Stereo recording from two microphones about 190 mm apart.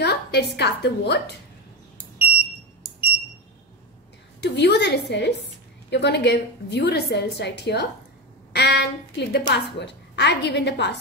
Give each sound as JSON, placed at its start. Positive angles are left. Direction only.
{"t": 0.0, "sound": "a woman's voice", "side_deg": 60}
{"t": 4.4, "sound": "a woman's voice", "side_deg": 60}